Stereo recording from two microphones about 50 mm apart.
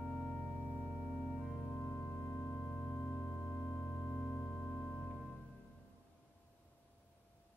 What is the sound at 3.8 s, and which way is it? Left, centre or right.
Organ, left.